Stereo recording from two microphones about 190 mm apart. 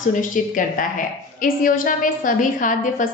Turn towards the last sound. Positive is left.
turn(degrees=45)  # may be behind; listen again after turning